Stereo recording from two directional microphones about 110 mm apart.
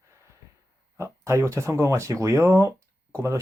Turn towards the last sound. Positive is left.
turn(degrees=-30)  # may be behind; listen again after turning